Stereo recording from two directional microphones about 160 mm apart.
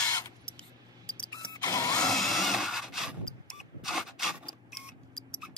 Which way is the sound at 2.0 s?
Centre (ahead or behind).